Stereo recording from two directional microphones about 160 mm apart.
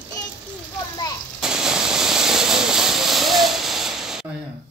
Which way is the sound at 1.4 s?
5° right (ahead or behind).